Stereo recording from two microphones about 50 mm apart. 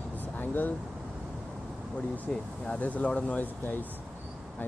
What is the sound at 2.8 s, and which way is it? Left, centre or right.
Speech, left.